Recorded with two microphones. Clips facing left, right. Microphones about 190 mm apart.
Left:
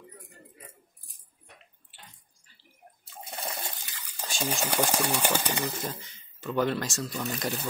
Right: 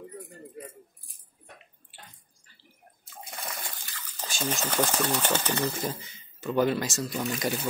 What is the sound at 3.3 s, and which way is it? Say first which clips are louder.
Water: left 3 dB; 25° left (ahead or behind).